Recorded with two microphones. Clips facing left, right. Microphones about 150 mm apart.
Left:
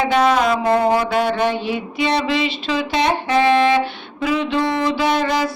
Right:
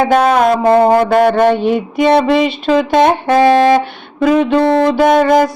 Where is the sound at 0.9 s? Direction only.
50° right (ahead or behind).